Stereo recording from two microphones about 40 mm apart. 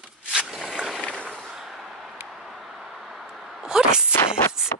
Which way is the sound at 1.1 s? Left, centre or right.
Left.